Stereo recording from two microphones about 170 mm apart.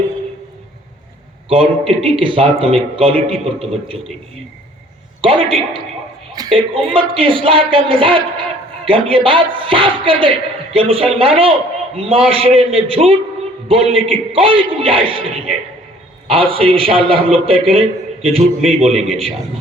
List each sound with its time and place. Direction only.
1.5 s speech: 35° right (ahead or behind)
5.2 s speech: 30° right (ahead or behind)
16.2 s speech: 30° right (ahead or behind)